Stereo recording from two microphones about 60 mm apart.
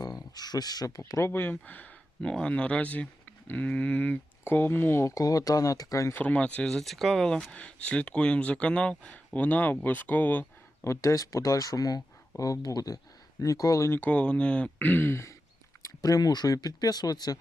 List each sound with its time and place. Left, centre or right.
0.0 s speech: left
1.3 s speech: left
2.2 s speech: centre
4.4 s speech: left
5.1 s speech: left
6.1 s speech: left
6.7 s speech: centre
7.4 s speech: left
10.8 s speech: left
13.4 s speech: left
14.1 s speech: centre
14.8 s speech: left
15.1 s a sound: left
15.8 s speech: left